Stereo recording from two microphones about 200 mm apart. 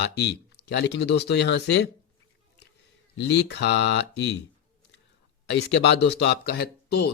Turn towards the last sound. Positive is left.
turn(degrees=55)  # may be behind; listen again after turning